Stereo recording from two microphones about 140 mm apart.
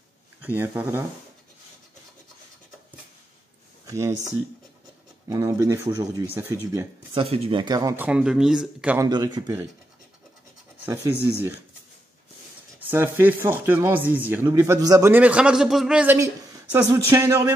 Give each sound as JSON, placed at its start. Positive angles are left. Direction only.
{"t": 0.4, "sound": "speech", "side_deg": -15}
{"t": 3.8, "sound": "speech", "side_deg": -25}
{"t": 5.3, "sound": "speech", "side_deg": -25}
{"t": 7.2, "sound": "speech", "side_deg": -45}
{"t": 7.9, "sound": "speech", "side_deg": -10}
{"t": 8.9, "sound": "speech", "side_deg": -25}
{"t": 12.8, "sound": "speech", "side_deg": -15}
{"t": 15.1, "sound": "speech", "side_deg": -10}
{"t": 16.7, "sound": "speech", "side_deg": -20}